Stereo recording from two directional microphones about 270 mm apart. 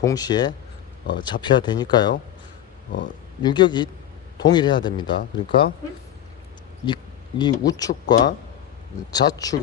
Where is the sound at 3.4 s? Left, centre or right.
Centre.